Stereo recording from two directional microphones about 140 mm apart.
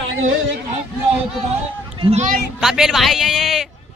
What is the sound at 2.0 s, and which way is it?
Speech, 45° right (ahead or behind).